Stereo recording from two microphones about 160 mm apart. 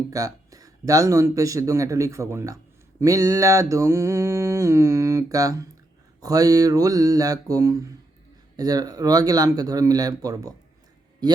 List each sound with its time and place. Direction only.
0.1 s mantra: 20° right (ahead or behind)